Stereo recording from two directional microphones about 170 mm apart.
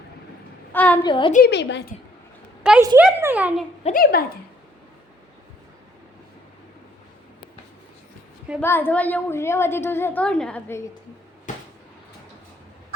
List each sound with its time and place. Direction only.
0.7 s a woman's voice: 10° left (ahead or behind)
1.0 s a woman's voice: 30° left (ahead or behind)
1.5 s a woman's voice: 90° left
2.6 s a woman's voice: 5° right (ahead or behind)
3.9 s speech: 65° left (ahead or behind)
8.6 s a woman's voice: 15° left (ahead or behind)
11.5 s a sound: 50° left (ahead or behind)